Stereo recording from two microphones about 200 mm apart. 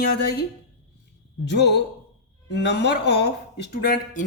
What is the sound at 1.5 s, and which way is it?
Speech, 60° left (ahead or behind).